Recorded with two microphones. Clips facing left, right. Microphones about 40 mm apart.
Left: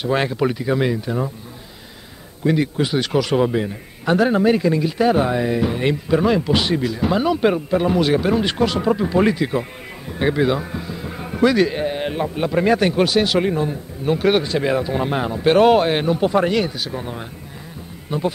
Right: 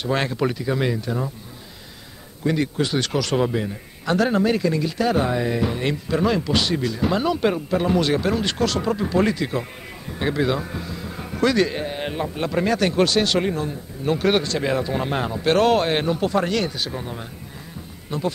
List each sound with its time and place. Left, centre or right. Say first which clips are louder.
0.0 s speech: left 3 dB; centre
2.4 s speech: left 3 dB; centre
16.2 s speech: left 4 dB; centre
17.0 s speech: left 3 dB; centre